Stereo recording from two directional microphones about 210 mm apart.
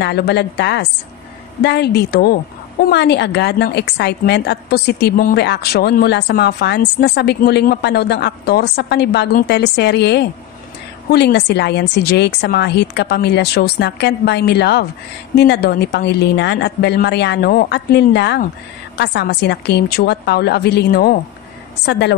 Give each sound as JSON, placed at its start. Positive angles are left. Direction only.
{"t": 0.0, "sound": "a woman's voice", "side_deg": 50}